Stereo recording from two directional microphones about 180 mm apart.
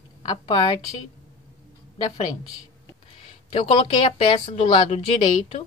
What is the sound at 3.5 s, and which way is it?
Speech, 30° left (ahead or behind).